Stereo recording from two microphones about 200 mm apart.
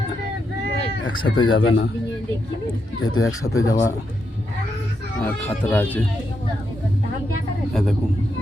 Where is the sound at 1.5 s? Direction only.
65° left (ahead or behind).